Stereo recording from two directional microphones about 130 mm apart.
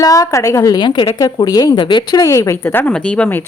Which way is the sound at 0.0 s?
25° left (ahead or behind).